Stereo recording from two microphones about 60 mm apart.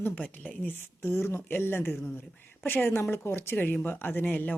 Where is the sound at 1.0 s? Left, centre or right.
Left.